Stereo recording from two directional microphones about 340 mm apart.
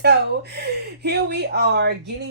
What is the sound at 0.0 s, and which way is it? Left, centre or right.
Speech, right.